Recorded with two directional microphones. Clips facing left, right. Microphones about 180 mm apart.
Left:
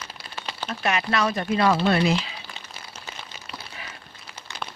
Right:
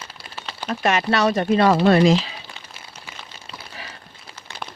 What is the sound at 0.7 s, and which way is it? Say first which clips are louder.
Speech: right 5 dB; 45° right (ahead or behind).